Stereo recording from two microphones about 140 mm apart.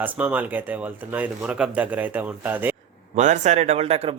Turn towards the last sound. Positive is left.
turn(degrees=-45)  # may be behind; listen again after turning